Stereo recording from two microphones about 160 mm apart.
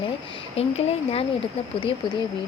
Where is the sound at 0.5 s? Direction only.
40° left (ahead or behind).